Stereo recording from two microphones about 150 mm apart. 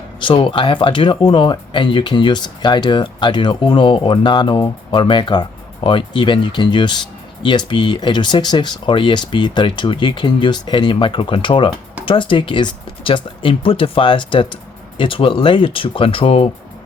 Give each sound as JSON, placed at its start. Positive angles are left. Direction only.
{"t": 0.2, "sound": "speech", "side_deg": 35}